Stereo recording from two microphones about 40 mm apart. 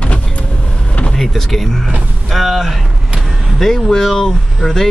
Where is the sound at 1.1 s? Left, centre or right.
Centre.